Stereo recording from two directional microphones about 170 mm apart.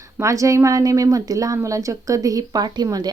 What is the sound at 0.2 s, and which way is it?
Speech, 20° right (ahead or behind).